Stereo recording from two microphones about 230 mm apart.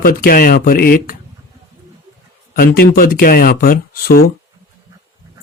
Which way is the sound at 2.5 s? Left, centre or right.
Left.